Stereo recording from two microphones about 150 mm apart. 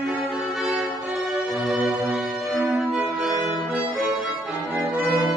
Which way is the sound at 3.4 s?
Centre (ahead or behind).